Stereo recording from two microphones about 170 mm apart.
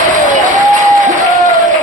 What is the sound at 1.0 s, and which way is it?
Applause, 50° right (ahead or behind).